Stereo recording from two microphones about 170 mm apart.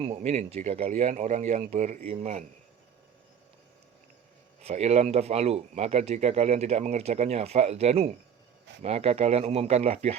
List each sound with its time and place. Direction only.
0.0 s speech: 35° right (ahead or behind)
4.6 s speech: 40° right (ahead or behind)